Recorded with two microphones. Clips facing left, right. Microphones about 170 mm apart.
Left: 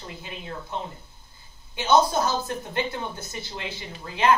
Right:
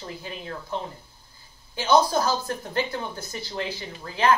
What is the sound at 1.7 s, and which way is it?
Speech, 25° left (ahead or behind).